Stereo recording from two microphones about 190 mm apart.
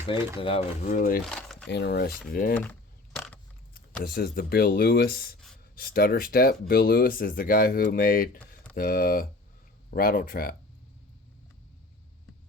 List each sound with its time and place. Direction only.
0.3 s speech: 30° left (ahead or behind)
0.8 s speech: 40° left (ahead or behind)
1.2 s a sound: centre (ahead or behind)
1.7 s speech: 60° left (ahead or behind)
4.1 s speech: 50° left (ahead or behind)